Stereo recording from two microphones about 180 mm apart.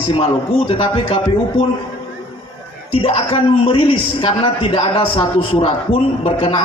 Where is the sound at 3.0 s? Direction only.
30° left (ahead or behind).